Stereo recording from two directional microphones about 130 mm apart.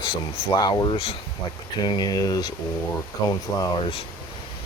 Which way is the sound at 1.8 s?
30° left (ahead or behind).